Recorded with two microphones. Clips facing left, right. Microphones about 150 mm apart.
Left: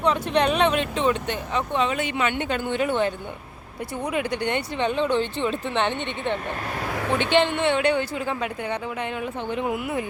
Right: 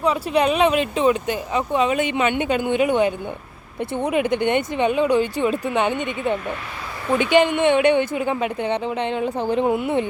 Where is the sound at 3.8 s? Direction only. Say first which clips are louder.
Right 6 dB; 25° right (ahead or behind).